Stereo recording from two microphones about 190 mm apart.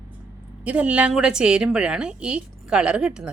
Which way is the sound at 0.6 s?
5° right (ahead or behind).